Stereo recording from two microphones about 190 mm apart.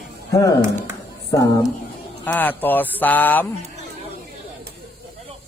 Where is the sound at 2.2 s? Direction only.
10° left (ahead or behind).